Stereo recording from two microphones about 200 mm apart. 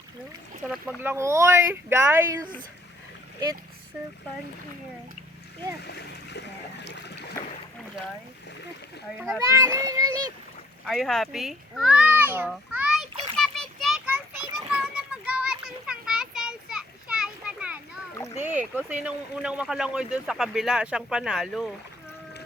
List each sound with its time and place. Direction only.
0.7 s speech: 10° right (ahead or behind)
5.8 s speech: 55° left (ahead or behind)
9.1 s speech: centre (ahead or behind)
9.5 s speech: 15° right (ahead or behind)
10.8 s children playing: centre (ahead or behind)
18.9 s speech: 5° right (ahead or behind)